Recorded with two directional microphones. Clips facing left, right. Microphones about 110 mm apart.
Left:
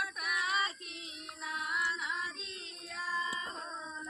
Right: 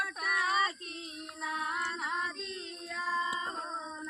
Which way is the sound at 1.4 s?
40° right (ahead or behind).